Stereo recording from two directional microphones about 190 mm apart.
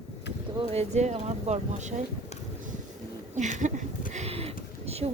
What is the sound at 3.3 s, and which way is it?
Speech, 40° right (ahead or behind).